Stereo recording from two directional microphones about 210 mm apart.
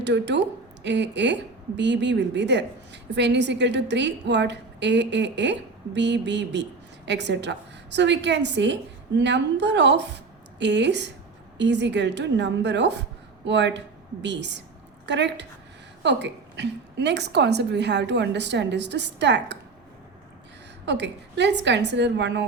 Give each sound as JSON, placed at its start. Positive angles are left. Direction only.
{"t": 0.0, "sound": "speech", "side_deg": -55}
{"t": 20.8, "sound": "speech", "side_deg": -55}